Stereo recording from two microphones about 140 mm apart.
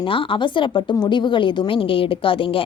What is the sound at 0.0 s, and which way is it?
A woman's voice, 40° left (ahead or behind).